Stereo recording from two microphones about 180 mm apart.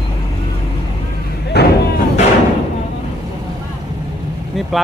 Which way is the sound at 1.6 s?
65° left (ahead or behind).